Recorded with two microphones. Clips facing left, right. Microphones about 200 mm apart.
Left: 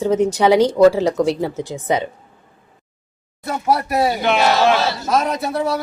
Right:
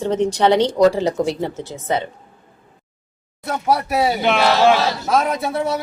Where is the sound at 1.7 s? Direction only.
15° left (ahead or behind).